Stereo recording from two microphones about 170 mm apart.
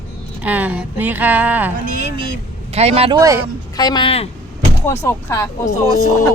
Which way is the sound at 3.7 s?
25° left (ahead or behind).